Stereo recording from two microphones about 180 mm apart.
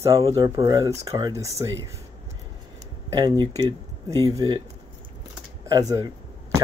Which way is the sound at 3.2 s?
20° right (ahead or behind).